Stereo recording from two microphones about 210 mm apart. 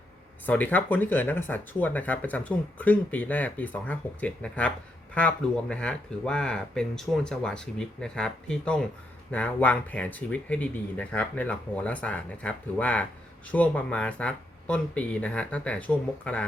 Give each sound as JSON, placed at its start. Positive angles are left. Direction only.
{"t": 0.4, "sound": "speech", "side_deg": 10}